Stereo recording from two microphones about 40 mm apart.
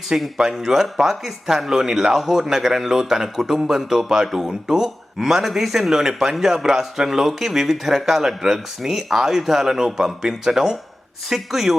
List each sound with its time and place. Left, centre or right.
0.3 s speech: centre